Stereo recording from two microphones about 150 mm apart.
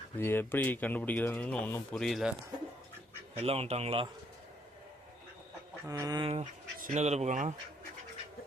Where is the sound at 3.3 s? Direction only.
40° right (ahead or behind).